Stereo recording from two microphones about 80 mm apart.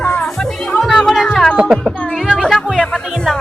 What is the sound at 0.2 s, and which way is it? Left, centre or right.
Music, centre.